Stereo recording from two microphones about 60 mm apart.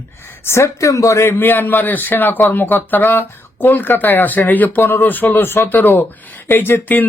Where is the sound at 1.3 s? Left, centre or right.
Left.